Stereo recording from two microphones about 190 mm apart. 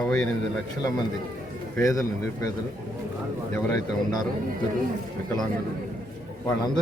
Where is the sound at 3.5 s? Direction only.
15° left (ahead or behind).